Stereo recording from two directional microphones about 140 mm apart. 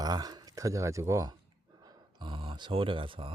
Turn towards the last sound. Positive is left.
turn(degrees=-40)  # may be behind; listen again after turning